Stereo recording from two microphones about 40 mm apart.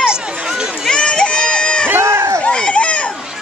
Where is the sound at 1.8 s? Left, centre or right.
Right.